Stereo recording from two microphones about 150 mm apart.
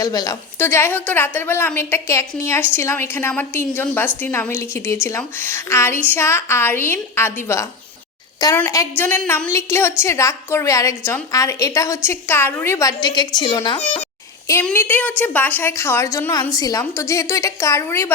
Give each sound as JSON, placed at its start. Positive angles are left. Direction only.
{"t": 0.0, "sound": "a woman's voice", "side_deg": 25}
{"t": 0.6, "sound": "a woman's voice", "side_deg": 15}
{"t": 14.6, "sound": "a woman's voice", "side_deg": 10}